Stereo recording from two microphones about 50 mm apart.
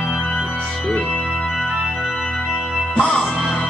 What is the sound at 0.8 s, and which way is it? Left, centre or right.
Speech, centre.